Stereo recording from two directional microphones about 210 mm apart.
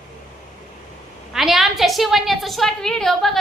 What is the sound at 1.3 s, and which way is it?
A woman's voice, centre (ahead or behind).